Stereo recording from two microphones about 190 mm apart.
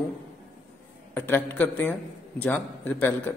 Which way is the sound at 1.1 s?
10° left (ahead or behind).